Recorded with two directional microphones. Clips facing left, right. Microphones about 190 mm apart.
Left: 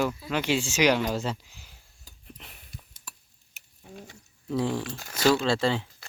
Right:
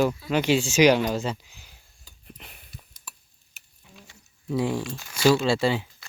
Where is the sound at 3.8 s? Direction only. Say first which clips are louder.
Left 8 dB; 50° left (ahead or behind).